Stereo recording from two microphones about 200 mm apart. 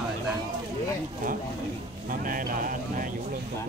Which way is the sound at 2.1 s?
45° right (ahead or behind).